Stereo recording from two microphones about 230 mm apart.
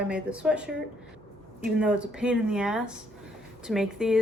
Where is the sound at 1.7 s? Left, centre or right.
Centre.